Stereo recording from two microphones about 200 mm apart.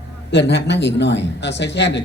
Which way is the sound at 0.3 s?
60° left (ahead or behind).